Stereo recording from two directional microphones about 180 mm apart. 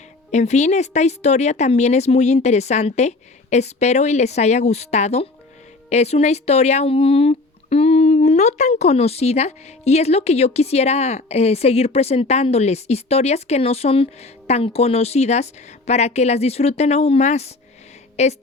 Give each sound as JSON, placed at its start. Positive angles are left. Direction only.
{"t": 0.3, "sound": "speech", "side_deg": 40}